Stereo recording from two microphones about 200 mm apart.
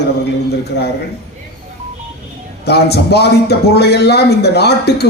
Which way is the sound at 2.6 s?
55° left (ahead or behind).